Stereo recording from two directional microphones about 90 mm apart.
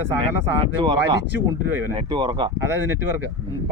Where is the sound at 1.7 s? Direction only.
25° right (ahead or behind).